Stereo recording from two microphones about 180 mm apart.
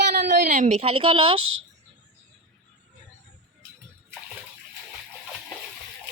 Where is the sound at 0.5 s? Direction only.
40° right (ahead or behind).